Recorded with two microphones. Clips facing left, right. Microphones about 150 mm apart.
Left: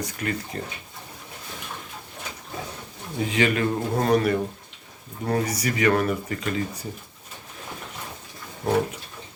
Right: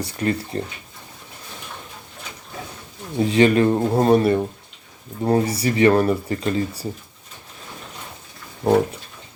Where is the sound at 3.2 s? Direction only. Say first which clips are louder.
Right 7 dB; 35° right (ahead or behind).